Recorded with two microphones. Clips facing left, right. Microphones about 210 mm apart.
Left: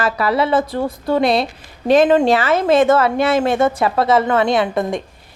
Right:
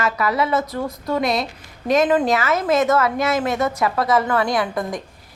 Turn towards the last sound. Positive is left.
turn(degrees=25)  # may be behind; listen again after turning